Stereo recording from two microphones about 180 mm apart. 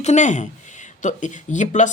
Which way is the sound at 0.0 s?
40° left (ahead or behind).